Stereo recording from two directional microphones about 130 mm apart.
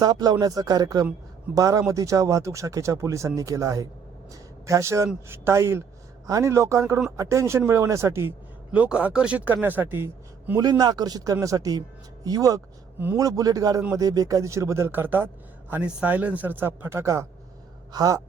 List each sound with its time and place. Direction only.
0.0 s speech: 30° right (ahead or behind)
8.7 s speech: 10° right (ahead or behind)
10.6 s speech: 30° right (ahead or behind)